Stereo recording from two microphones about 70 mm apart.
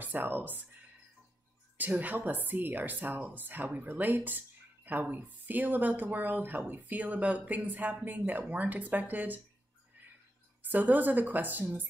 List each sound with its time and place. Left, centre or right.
0.0 s speech: right
1.8 s speech: right
10.6 s speech: right